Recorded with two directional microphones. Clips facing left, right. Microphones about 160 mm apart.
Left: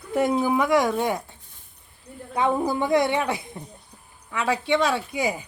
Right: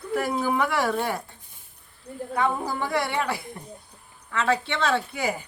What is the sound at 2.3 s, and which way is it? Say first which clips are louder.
A woman's voice: left 4 dB; 20° left (ahead or behind).